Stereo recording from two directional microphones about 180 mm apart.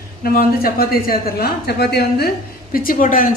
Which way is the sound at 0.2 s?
55° left (ahead or behind).